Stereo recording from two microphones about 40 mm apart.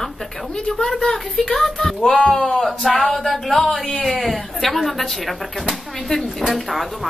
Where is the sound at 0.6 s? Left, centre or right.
Centre.